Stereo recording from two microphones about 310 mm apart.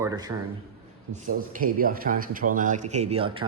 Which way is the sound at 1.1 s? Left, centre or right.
Right.